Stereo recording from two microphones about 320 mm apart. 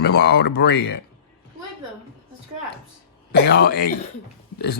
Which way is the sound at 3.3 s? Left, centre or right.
Left.